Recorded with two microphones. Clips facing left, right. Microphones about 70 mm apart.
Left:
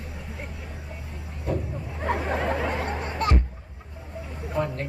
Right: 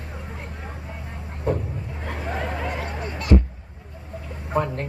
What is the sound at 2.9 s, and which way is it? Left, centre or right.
Music, left.